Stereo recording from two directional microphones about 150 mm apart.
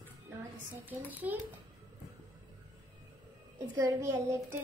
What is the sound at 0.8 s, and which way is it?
Speech, 10° right (ahead or behind).